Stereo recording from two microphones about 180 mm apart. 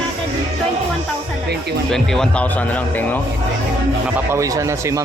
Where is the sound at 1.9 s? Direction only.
5° left (ahead or behind).